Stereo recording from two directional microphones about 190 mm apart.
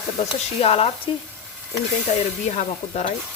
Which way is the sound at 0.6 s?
30° left (ahead or behind).